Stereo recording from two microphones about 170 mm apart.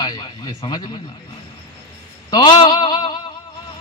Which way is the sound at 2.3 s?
25° left (ahead or behind).